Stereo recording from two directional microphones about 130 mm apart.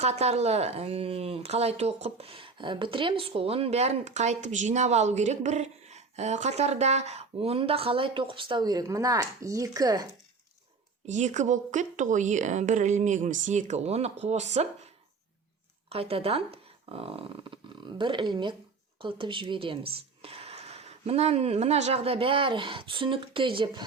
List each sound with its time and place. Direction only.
0.0 s speech: 55° right (ahead or behind); by 10.1 s 30° right (ahead or behind)
11.0 s speech: 65° right (ahead or behind)
15.9 s speech: 50° right (ahead or behind)